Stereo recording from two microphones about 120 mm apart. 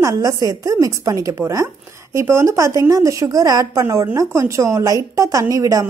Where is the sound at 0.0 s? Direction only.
25° right (ahead or behind).